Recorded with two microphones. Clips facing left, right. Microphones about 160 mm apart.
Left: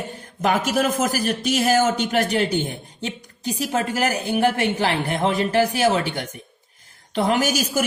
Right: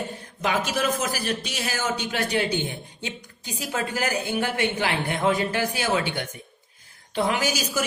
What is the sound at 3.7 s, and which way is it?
Speech, 40° left (ahead or behind).